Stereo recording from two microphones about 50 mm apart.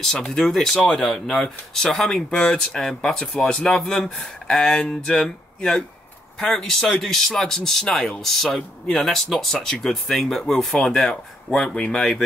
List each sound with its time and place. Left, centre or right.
0.3 s speech: centre
8.2 s speech: centre
8.5 s speech: centre
8.9 s speech: centre